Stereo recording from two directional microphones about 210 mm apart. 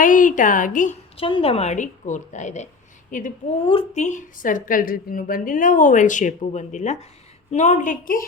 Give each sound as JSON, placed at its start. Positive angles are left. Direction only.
{"t": 0.0, "sound": "a woman's voice", "side_deg": 40}
{"t": 1.1, "sound": "a woman's voice", "side_deg": 25}